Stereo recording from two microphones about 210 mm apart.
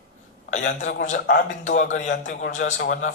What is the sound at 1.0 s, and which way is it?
Speech, 40° left (ahead or behind).